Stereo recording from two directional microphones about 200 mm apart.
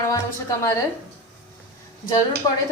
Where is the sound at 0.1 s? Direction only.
15° left (ahead or behind).